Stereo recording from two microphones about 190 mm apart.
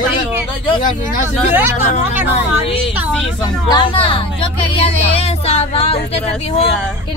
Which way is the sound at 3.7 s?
25° left (ahead or behind).